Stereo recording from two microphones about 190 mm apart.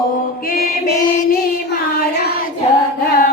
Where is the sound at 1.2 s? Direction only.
50° left (ahead or behind).